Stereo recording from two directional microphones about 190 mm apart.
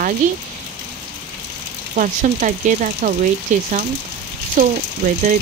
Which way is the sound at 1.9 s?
40° right (ahead or behind).